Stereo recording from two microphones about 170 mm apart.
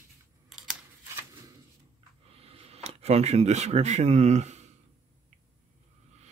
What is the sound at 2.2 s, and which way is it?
Speech, 35° right (ahead or behind).